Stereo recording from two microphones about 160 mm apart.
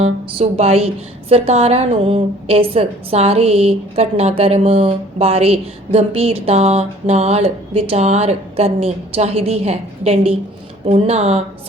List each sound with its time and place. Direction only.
0.0 s a woman's voice: 40° right (ahead or behind)